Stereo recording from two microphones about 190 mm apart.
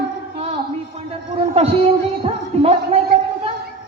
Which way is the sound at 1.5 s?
30° right (ahead or behind).